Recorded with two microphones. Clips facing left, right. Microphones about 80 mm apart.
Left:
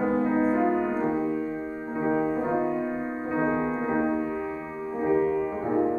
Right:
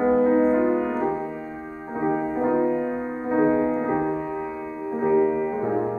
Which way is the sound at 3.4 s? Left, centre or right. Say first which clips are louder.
Right 6 dB; centre.